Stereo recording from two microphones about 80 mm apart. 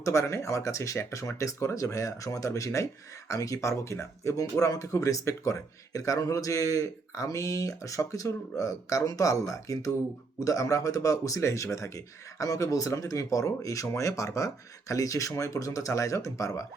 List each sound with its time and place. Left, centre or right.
0.0 s speech: left